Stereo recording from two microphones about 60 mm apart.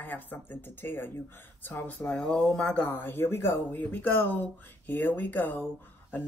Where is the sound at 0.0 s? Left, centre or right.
Left; by 2.8 s centre.